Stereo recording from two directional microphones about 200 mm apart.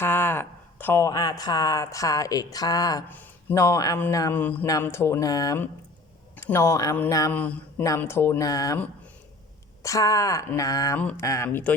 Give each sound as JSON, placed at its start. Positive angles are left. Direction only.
{"t": 0.0, "sound": "speech", "side_deg": 10}